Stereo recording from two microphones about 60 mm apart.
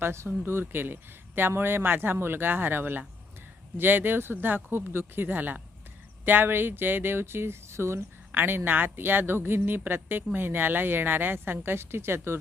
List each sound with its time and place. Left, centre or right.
0.0 s a woman's voice: right
8.3 s a woman's voice: right